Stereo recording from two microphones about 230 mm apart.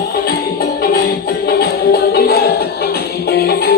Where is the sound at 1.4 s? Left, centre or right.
Left.